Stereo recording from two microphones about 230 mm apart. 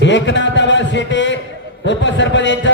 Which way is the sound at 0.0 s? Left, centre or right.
Left.